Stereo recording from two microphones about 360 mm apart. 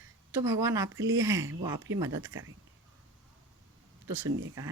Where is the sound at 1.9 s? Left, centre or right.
Right.